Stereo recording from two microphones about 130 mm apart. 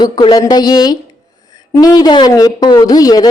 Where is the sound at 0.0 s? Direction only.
30° left (ahead or behind).